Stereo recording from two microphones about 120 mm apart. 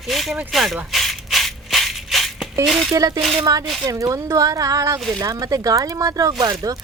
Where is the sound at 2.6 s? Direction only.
Centre (ahead or behind).